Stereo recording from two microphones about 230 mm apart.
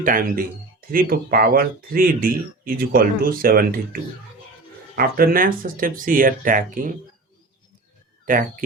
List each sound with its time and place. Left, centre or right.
0.0 s speech: right
4.9 s speech: right
8.2 s speech: right